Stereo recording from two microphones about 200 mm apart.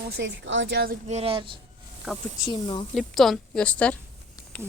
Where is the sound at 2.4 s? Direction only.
25° left (ahead or behind).